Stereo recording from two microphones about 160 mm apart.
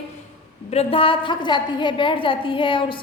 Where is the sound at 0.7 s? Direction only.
40° left (ahead or behind).